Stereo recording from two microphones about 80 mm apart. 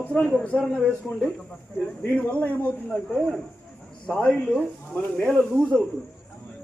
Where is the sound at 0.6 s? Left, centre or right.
Centre.